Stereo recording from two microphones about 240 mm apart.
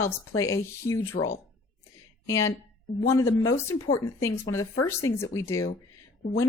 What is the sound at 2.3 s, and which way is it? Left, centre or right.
Speech, centre.